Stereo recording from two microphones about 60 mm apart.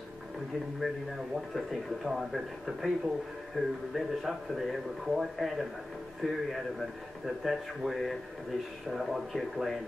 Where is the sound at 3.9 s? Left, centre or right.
Centre.